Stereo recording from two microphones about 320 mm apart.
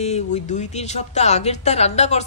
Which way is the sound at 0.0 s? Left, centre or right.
Left.